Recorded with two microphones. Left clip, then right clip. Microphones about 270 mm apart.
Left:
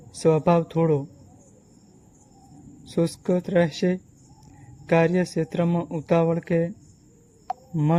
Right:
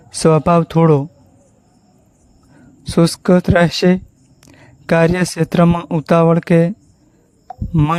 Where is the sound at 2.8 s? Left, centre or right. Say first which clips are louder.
Right 10 dB; right.